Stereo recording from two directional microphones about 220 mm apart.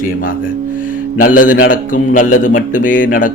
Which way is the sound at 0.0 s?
40° left (ahead or behind).